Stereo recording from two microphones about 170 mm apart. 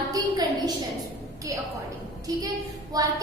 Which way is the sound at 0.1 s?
25° right (ahead or behind).